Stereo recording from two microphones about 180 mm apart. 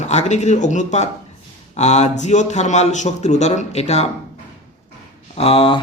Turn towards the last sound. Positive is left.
turn(degrees=30)  # may be behind; listen again after turning